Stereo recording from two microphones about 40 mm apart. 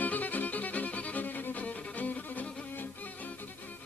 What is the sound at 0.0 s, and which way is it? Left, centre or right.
Violin, left.